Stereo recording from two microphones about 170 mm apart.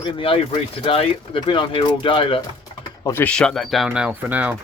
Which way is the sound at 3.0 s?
15° left (ahead or behind).